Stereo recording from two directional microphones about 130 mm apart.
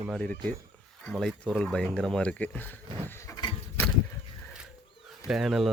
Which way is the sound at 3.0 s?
20° left (ahead or behind).